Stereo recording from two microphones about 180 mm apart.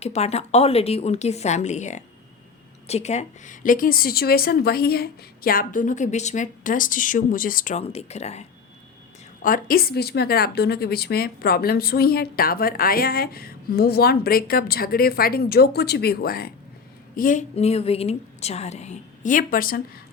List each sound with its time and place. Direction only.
0.0 s a woman's voice: 35° left (ahead or behind)
9.4 s a woman's voice: 50° left (ahead or behind)
17.2 s a woman's voice: 45° left (ahead or behind)